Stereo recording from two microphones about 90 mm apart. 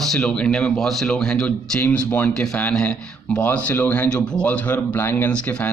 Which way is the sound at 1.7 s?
20° left (ahead or behind).